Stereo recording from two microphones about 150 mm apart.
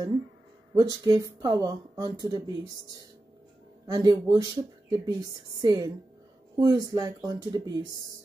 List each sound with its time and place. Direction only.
0.7 s speech: 25° right (ahead or behind)
3.8 s speech: 25° right (ahead or behind)